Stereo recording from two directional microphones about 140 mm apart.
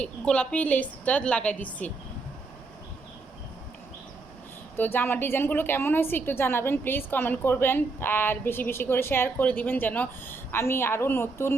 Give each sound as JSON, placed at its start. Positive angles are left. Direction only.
{"t": 0.0, "sound": "a woman's voice", "side_deg": 10}
{"t": 4.8, "sound": "a woman's voice", "side_deg": 15}